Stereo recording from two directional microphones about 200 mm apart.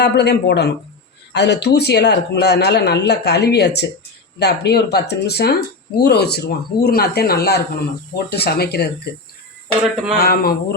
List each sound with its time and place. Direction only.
0.0 s speech: 55° left (ahead or behind)
9.8 s a sound: centre (ahead or behind)
10.2 s speech: 50° left (ahead or behind)